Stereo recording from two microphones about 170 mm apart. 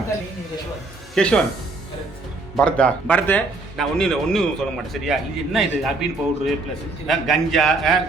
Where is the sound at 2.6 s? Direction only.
5° left (ahead or behind).